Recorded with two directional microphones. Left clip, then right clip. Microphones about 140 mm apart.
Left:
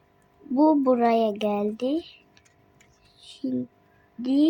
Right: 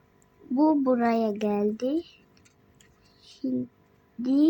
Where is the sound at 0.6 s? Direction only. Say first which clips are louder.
Left 3 dB; 35° left (ahead or behind).